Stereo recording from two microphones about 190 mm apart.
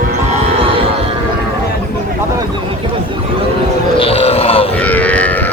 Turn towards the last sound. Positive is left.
turn(degrees=10)  # may be behind; listen again after turning